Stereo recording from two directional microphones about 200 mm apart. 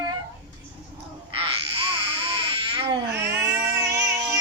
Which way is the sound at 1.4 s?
25° right (ahead or behind).